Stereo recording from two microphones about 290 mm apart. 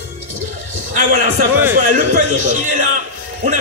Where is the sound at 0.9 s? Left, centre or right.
Right.